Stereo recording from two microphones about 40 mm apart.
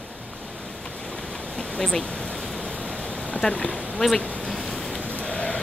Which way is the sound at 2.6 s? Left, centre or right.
Left.